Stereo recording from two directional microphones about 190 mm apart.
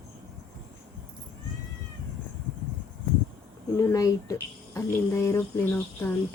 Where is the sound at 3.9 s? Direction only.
20° left (ahead or behind).